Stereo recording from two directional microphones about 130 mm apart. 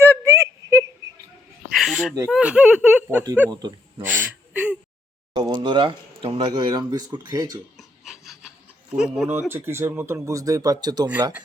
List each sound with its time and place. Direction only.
0.0 s a sound: 20° right (ahead or behind)
1.7 s a sound: centre (ahead or behind)
2.3 s speech: 10° right (ahead or behind)
3.5 s speech: 35° right (ahead or behind)
4.0 s gasp: 15° right (ahead or behind)
5.3 s speech: 35° right (ahead or behind)
7.8 s filing: centre (ahead or behind)
8.9 s speech: 5° right (ahead or behind)
9.5 s speech: 20° right (ahead or behind)